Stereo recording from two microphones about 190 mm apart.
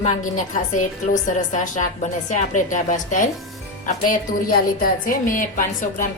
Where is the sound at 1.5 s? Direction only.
40° left (ahead or behind).